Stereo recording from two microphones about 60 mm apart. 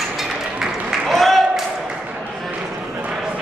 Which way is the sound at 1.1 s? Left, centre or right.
Centre.